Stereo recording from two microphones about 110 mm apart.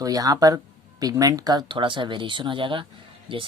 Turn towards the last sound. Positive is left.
turn(degrees=-50)  # may be behind; listen again after turning